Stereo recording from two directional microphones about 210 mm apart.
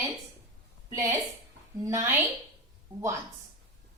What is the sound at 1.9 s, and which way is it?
Speech, 15° right (ahead or behind).